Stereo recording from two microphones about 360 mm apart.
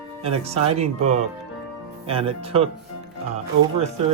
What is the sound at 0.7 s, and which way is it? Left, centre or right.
Speech, centre.